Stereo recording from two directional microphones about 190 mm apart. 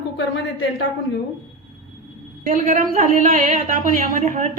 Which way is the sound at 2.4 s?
45° right (ahead or behind).